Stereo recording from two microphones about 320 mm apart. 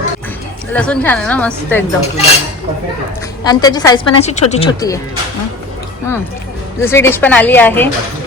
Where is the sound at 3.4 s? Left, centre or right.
Centre.